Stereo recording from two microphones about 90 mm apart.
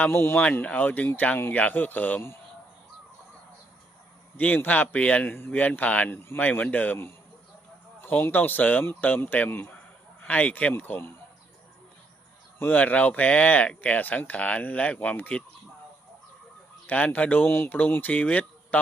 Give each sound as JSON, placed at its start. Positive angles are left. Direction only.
{"t": 0.0, "sound": "speech", "side_deg": 25}
{"t": 0.4, "sound": "speech", "side_deg": 15}
{"t": 4.4, "sound": "speech", "side_deg": 20}
{"t": 12.5, "sound": "speech", "side_deg": 20}
{"t": 16.8, "sound": "speech", "side_deg": 20}